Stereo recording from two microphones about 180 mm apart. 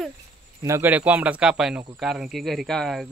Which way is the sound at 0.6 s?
15° right (ahead or behind).